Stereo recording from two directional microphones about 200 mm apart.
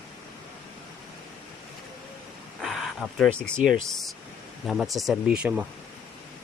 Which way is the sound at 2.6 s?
Centre (ahead or behind).